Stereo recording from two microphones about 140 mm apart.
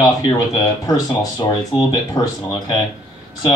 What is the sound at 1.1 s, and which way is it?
Speech, 30° left (ahead or behind).